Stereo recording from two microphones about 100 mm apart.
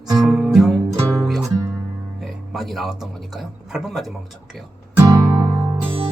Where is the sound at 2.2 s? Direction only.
Centre (ahead or behind).